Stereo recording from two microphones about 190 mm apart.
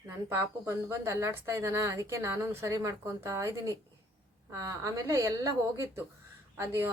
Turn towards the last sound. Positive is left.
turn(degrees=-15)  # may be behind; listen again after turning